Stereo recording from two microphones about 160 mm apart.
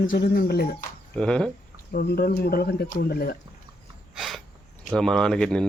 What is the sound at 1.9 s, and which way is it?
Speech, 75° left (ahead or behind).